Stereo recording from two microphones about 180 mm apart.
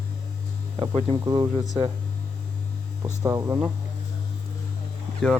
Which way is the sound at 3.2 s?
20° right (ahead or behind).